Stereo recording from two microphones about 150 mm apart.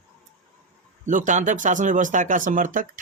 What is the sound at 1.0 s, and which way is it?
Speech, 55° right (ahead or behind).